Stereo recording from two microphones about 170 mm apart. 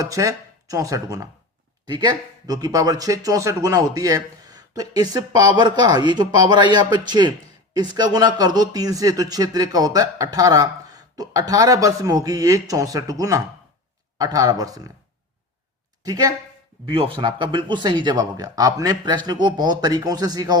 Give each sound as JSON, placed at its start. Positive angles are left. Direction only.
{"t": 0.0, "sound": "speech", "side_deg": -20}
{"t": 16.0, "sound": "speech", "side_deg": -20}
{"t": 16.8, "sound": "speech", "side_deg": -30}